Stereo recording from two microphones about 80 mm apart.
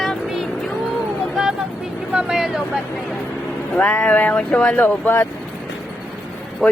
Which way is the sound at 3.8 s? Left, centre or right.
Centre.